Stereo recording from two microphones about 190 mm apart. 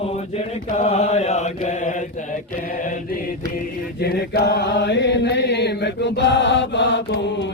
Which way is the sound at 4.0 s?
60° left (ahead or behind).